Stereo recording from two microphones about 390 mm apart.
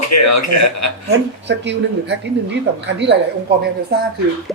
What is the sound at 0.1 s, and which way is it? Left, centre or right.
Speech, left.